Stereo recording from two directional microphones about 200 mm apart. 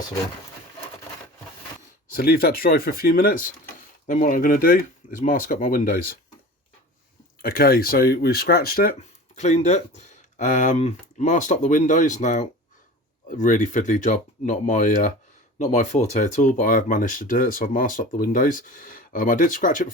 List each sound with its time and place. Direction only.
2.1 s speech: 50° left (ahead or behind)
7.4 s speech: 50° left (ahead or behind)